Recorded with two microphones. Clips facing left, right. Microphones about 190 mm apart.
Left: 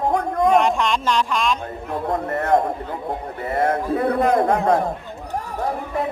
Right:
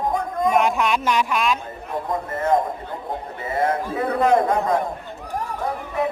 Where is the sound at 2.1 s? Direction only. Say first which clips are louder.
Left 1 dB; 65° left (ahead or behind).